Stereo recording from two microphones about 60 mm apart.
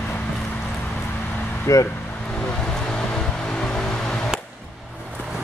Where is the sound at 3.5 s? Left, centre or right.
Centre.